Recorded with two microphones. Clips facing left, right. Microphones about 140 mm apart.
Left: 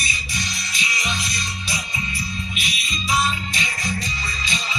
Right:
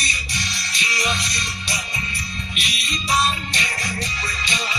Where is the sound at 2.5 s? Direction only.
75° right (ahead or behind).